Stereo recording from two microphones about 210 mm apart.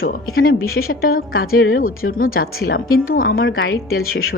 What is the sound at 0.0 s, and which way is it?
A woman's voice, 45° left (ahead or behind).